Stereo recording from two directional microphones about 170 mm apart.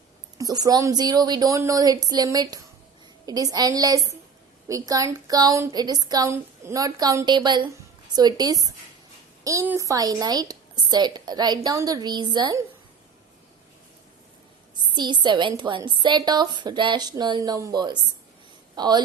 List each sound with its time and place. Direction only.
0.3 s a woman's voice: 20° right (ahead or behind)
14.8 s a woman's voice: 25° right (ahead or behind)